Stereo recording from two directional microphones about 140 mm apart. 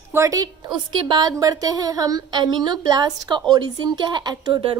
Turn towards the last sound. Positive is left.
turn(degrees=-30)  # may be behind; listen again after turning